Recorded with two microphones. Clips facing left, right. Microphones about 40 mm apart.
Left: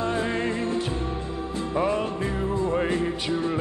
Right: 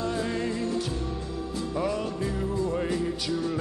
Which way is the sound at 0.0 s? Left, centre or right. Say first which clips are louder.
Left 3 dB; left.